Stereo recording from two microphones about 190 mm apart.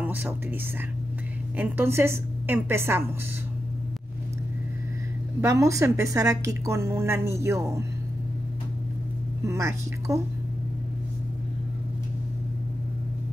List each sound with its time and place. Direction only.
0.0 s speech: 10° right (ahead or behind)
1.6 s a woman's voice: 10° right (ahead or behind)
5.4 s a woman's voice: 15° right (ahead or behind)
9.4 s a woman's voice: 15° right (ahead or behind)